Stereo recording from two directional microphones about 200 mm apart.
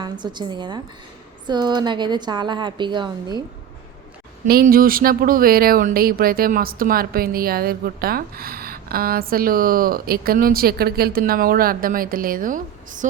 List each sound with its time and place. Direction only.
0.0 s a woman's voice: 20° right (ahead or behind)
4.4 s speech: 50° right (ahead or behind)